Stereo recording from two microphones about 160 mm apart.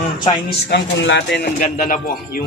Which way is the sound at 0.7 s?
90° left.